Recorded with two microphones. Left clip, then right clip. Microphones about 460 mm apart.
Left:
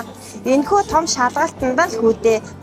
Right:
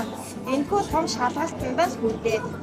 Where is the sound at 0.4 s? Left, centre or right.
Left.